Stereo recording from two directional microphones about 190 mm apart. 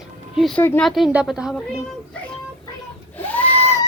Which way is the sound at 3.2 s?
10° left (ahead or behind).